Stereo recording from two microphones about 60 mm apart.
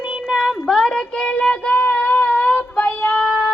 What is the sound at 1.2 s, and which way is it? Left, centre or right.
Child singing, centre.